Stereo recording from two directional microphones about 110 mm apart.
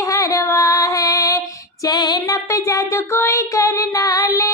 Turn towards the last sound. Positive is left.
turn(degrees=30)  # may be behind; listen again after turning